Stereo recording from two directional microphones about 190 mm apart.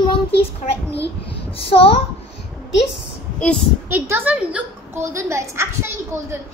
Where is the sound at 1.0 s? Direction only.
30° left (ahead or behind).